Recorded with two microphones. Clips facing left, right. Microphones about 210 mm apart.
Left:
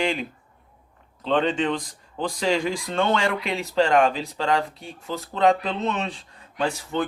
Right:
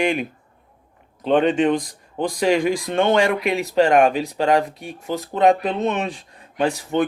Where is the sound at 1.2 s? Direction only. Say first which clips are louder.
Right 6 dB; 15° right (ahead or behind).